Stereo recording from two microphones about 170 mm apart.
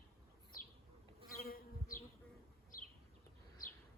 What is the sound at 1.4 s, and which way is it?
Bee, 60° left (ahead or behind).